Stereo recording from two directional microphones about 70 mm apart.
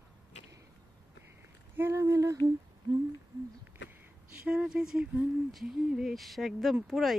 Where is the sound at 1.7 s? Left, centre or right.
Right.